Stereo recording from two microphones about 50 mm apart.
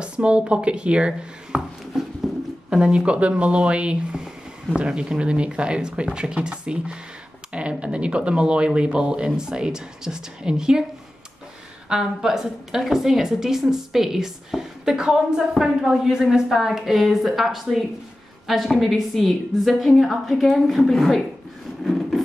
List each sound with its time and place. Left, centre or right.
0.0 s speech: right
2.0 s a sound: centre
2.7 s speech: centre
11.9 s a woman's voice: centre
15.5 s a woman's voice: centre
21.8 s a sound: centre